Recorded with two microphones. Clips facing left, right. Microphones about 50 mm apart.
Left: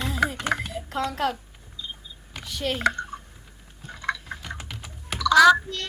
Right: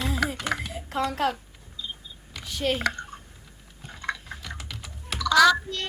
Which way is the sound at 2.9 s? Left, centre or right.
Centre.